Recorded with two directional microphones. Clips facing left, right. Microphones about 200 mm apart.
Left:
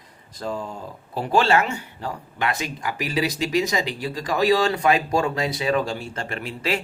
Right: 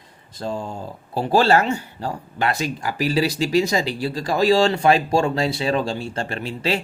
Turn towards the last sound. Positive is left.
turn(degrees=-30)  # may be behind; listen again after turning